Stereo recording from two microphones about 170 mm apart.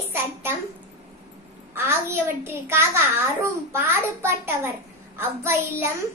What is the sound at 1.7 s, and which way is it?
A child's voice, 15° right (ahead or behind).